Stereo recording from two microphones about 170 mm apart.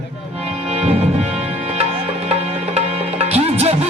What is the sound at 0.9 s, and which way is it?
Speech, 35° right (ahead or behind).